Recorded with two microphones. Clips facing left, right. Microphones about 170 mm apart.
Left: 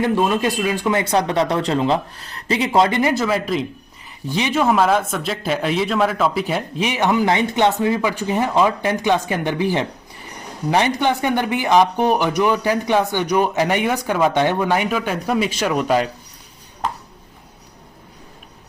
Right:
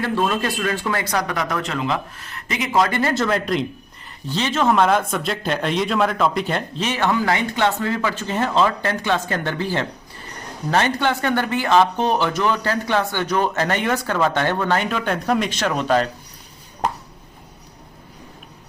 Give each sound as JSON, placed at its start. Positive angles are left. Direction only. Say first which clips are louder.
{"t": 0.0, "sound": "speech", "louder": "left 3 dB", "side_deg": 15}
{"t": 3.0, "sound": "speech", "louder": "left 2 dB", "side_deg": 10}
{"t": 4.3, "sound": "speech", "louder": "left 1 dB", "side_deg": 15}